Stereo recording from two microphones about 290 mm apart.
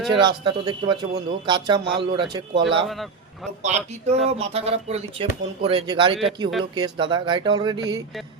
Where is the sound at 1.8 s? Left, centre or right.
Right.